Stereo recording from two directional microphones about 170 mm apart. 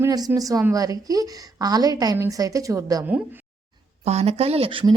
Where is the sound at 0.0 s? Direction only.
20° right (ahead or behind).